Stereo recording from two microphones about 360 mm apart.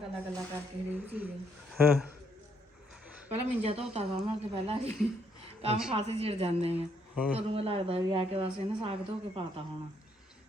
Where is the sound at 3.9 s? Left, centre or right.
Centre.